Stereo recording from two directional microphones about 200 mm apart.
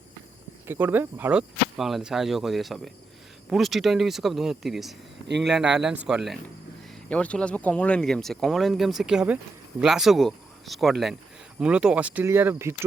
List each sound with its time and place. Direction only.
0.7 s speech: 10° right (ahead or behind)